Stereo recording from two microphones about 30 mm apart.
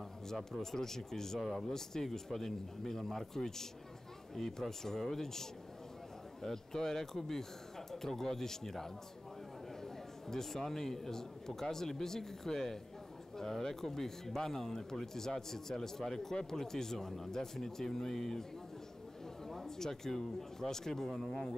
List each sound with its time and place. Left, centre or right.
0.3 s speech: centre
19.4 s speech: centre